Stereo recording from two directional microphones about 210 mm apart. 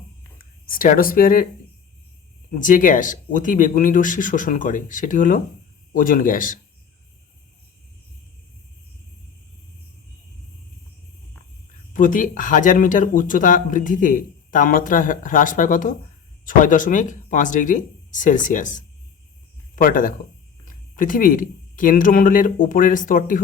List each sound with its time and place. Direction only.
0.7 s speech: 40° left (ahead or behind)
2.6 s speech: 40° left (ahead or behind)
11.9 s speech: 40° left (ahead or behind)